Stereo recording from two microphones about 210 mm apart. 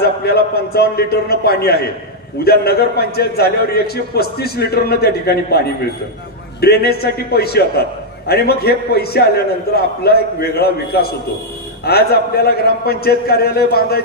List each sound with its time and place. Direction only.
0.0 s a man's voice: 50° left (ahead or behind)